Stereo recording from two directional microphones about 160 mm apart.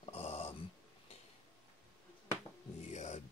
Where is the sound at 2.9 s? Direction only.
45° left (ahead or behind).